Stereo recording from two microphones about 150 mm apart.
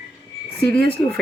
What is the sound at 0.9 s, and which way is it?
Speech, 5° left (ahead or behind).